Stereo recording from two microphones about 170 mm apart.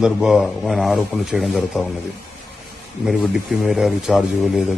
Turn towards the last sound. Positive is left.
turn(degrees=0)  # may be behind; listen again after turning